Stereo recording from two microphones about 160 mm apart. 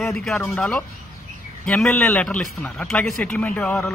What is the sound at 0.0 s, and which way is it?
A man's voice, centre (ahead or behind).